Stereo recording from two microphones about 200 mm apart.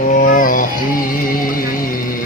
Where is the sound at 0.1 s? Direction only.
40° left (ahead or behind).